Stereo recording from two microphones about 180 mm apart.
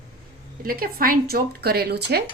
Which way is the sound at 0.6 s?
55° right (ahead or behind).